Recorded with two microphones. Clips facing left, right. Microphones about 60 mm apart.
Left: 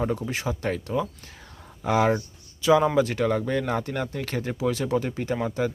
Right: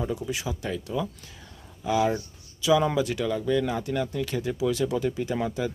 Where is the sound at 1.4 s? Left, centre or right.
Left.